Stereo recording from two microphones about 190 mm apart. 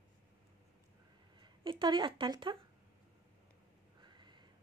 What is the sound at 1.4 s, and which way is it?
Speech, 25° right (ahead or behind).